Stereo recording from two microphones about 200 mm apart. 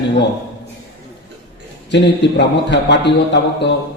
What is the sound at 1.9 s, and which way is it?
A man's voice, 60° left (ahead or behind).